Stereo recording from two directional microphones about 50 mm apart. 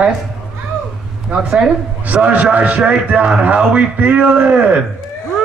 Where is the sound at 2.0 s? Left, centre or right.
Right.